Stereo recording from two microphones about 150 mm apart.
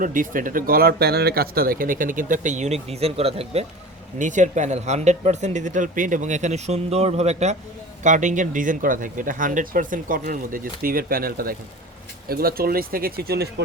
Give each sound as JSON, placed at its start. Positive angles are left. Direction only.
{"t": 0.0, "sound": "speech", "side_deg": -65}
{"t": 4.2, "sound": "speech", "side_deg": -55}